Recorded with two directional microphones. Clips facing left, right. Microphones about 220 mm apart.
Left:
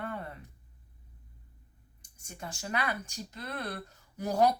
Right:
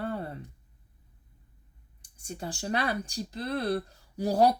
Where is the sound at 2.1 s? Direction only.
30° right (ahead or behind).